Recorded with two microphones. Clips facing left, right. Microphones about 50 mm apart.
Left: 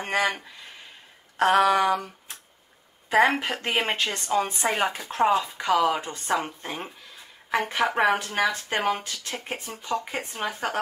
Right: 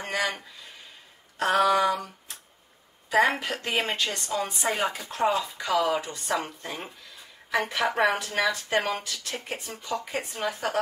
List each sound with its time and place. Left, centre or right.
0.0 s a sound: left
1.4 s a woman's voice: left
5.0 s a woman's voice: left
9.8 s a woman's voice: left